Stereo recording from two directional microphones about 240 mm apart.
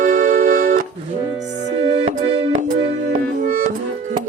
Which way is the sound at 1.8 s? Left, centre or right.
Right.